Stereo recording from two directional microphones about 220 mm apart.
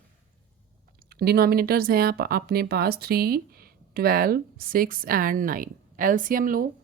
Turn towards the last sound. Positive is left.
turn(degrees=-40)  # may be behind; listen again after turning